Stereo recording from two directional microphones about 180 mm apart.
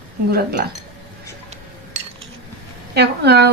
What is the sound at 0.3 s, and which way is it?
Speech, 60° right (ahead or behind).